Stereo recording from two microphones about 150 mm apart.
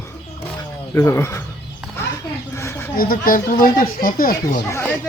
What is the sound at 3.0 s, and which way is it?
Speech, 70° left (ahead or behind).